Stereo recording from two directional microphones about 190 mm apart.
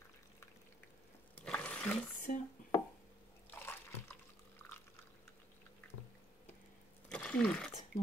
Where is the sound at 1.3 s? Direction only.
5° left (ahead or behind).